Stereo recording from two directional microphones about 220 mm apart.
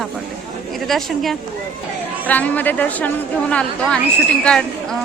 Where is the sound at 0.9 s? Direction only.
Centre (ahead or behind).